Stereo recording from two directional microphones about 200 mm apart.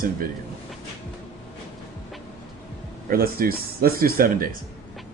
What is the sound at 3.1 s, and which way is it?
Speech, 50° right (ahead or behind).